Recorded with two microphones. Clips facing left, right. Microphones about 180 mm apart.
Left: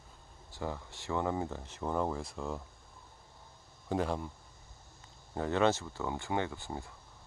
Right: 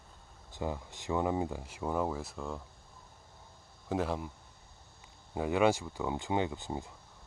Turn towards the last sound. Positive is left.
turn(degrees=-20)  # may be behind; listen again after turning